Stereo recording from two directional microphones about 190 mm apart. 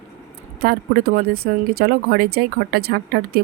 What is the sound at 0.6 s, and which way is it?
Speech, 55° right (ahead or behind).